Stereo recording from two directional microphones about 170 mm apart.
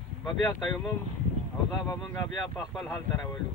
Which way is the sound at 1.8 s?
20° left (ahead or behind).